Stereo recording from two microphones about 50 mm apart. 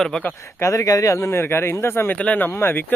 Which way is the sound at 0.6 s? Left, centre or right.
Left.